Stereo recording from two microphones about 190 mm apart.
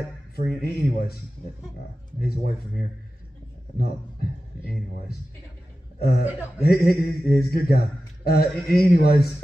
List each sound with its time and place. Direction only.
0.4 s speech: 55° left (ahead or behind)
3.7 s speech: 55° left (ahead or behind)
5.9 s speech: 55° left (ahead or behind)